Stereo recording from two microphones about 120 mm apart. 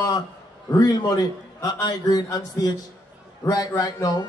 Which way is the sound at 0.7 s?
30° left (ahead or behind).